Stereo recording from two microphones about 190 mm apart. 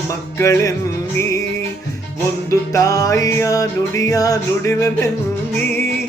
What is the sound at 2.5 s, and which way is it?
Music, 15° left (ahead or behind).